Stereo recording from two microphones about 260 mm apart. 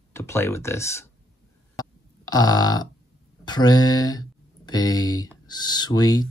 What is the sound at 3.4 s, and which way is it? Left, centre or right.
Speech, centre.